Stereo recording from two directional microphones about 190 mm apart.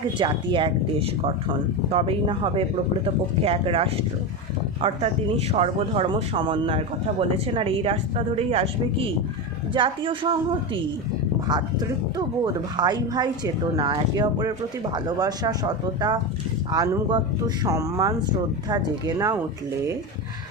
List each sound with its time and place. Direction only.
0.2 s speech: 25° right (ahead or behind)
5.5 s speech: 35° right (ahead or behind); by 19.4 s 15° right (ahead or behind)